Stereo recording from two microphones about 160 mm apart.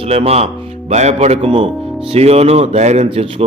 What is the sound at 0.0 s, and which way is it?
A man's voice, 40° right (ahead or behind).